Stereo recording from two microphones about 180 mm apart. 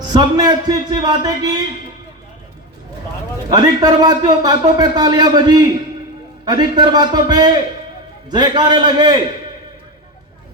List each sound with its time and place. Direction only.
0.1 s a man's voice: 20° right (ahead or behind)
3.5 s a man's voice: 20° right (ahead or behind)